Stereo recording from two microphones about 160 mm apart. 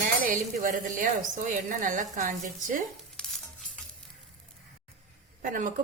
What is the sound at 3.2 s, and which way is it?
Stir, 5° left (ahead or behind).